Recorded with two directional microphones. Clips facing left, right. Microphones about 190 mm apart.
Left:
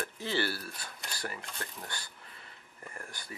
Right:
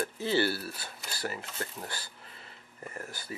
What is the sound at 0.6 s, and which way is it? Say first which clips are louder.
Speech: right 3 dB; 5° right (ahead or behind).